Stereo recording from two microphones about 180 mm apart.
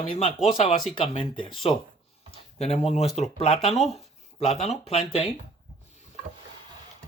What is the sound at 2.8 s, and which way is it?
Speech, 35° left (ahead or behind).